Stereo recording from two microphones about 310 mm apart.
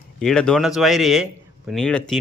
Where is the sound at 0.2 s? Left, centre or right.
Centre.